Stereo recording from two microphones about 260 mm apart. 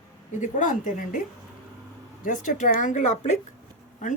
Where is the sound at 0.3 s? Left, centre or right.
Left.